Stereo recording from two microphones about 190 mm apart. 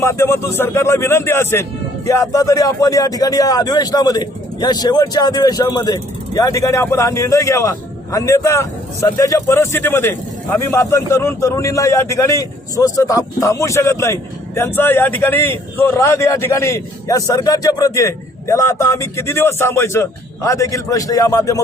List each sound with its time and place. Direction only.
0.0 s speech: 15° left (ahead or behind)